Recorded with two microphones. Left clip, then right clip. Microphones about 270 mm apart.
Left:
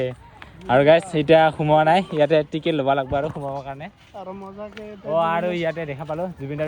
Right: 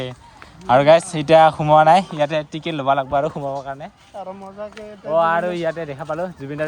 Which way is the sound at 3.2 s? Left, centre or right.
Right.